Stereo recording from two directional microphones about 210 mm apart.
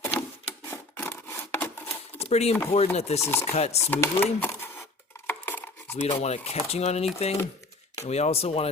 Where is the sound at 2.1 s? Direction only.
30° left (ahead or behind).